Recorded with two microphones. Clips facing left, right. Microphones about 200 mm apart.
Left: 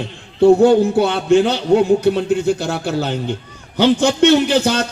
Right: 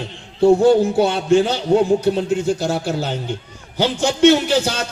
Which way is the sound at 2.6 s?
65° left (ahead or behind).